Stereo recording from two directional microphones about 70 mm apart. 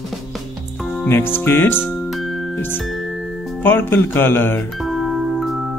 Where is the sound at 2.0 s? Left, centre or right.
Centre.